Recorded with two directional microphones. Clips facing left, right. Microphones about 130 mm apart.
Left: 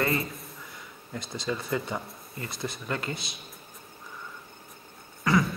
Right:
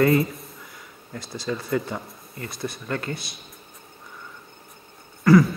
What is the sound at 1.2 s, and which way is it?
Speech, 20° left (ahead or behind).